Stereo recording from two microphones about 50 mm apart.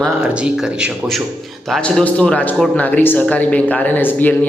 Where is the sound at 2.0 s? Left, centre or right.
Left.